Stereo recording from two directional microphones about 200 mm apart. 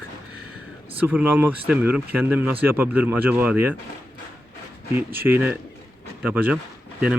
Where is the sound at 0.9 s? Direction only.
10° right (ahead or behind).